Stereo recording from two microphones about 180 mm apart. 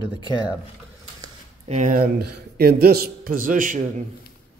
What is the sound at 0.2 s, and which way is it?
Speech, 25° left (ahead or behind).